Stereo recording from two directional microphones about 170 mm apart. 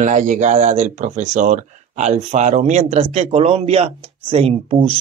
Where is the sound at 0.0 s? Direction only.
50° right (ahead or behind).